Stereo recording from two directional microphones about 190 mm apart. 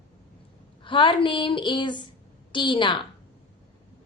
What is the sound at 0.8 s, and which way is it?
A woman's voice, 25° left (ahead or behind).